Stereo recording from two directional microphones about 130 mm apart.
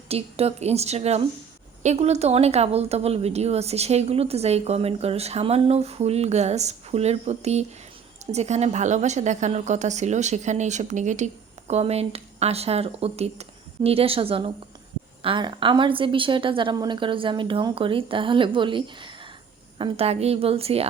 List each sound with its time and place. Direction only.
0.1 s a woman's voice: 50° right (ahead or behind); by 11.3 s 70° right (ahead or behind)
11.7 s a woman's voice: 55° right (ahead or behind)
19.8 s a woman's voice: 50° right (ahead or behind)